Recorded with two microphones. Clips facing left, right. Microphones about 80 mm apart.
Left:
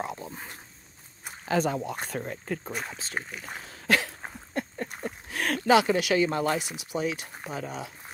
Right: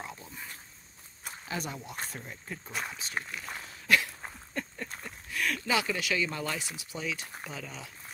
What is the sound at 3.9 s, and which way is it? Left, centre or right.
Cough, left.